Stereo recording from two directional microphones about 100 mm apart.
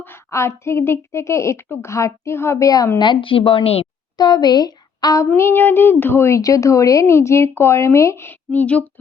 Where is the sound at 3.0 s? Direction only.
55° left (ahead or behind); by 3.9 s 85° left.